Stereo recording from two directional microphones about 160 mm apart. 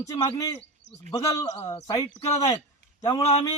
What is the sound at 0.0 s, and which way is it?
A man's voice, 20° left (ahead or behind).